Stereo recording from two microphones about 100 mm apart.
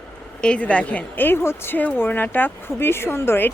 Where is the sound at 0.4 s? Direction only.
10° left (ahead or behind).